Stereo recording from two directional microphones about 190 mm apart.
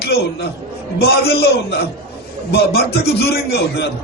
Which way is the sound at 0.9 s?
55° left (ahead or behind).